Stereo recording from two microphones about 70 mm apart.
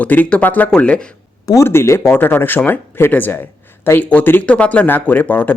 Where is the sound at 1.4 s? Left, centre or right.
Left.